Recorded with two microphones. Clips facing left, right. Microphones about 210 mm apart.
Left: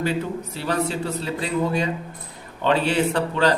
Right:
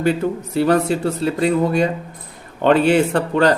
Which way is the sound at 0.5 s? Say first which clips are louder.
Right 9 dB; 50° right (ahead or behind).